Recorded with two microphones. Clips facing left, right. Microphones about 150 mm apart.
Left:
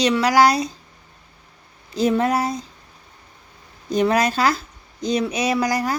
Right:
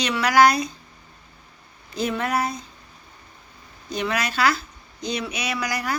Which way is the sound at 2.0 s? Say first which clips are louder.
Left 6 dB; 35° left (ahead or behind).